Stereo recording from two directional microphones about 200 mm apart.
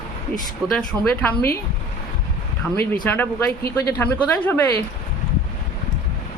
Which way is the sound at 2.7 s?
10° left (ahead or behind).